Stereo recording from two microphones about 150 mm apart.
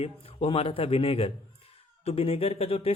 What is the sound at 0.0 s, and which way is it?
A man's voice, 40° left (ahead or behind).